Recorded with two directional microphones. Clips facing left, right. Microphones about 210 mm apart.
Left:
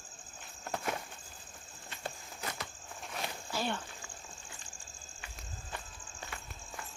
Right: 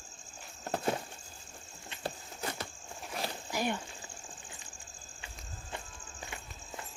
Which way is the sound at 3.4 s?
15° right (ahead or behind).